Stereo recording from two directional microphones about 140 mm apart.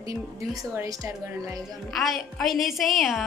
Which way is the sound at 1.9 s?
Centre (ahead or behind).